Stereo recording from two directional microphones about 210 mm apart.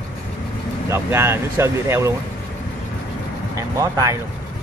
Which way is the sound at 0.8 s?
10° right (ahead or behind).